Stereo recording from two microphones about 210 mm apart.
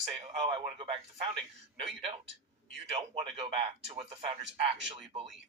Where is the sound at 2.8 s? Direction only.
30° right (ahead or behind).